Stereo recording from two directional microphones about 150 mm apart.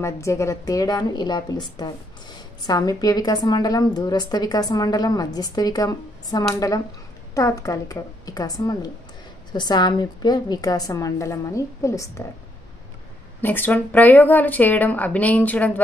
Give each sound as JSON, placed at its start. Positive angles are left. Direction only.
{"t": 0.0, "sound": "a woman's voice", "side_deg": 20}
{"t": 13.4, "sound": "speech", "side_deg": 10}